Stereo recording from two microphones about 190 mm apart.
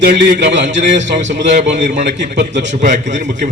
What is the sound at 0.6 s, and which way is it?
A man's voice, 40° right (ahead or behind).